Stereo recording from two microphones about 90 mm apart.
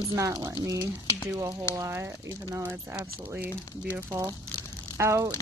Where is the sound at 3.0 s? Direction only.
20° right (ahead or behind).